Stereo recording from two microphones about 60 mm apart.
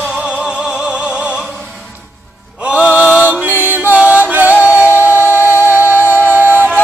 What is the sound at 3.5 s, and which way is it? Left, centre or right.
Music, right.